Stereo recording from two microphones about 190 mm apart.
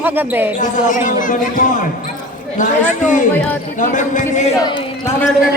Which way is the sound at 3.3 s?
10° left (ahead or behind).